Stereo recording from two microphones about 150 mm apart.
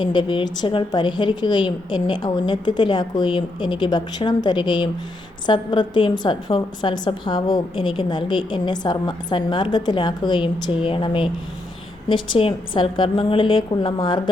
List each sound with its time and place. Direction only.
0.0 s a woman's voice: 30° left (ahead or behind)